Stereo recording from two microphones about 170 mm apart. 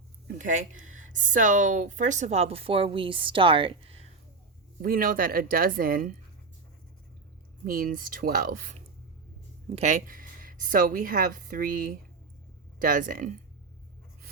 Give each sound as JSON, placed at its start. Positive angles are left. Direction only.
{"t": 0.3, "sound": "speech", "side_deg": -50}
{"t": 4.8, "sound": "speech", "side_deg": -60}
{"t": 7.6, "sound": "speech", "side_deg": -55}
{"t": 9.6, "sound": "a woman's voice", "side_deg": -45}